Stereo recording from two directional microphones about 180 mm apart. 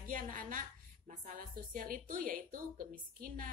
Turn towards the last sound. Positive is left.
turn(degrees=-50)  # may be behind; listen again after turning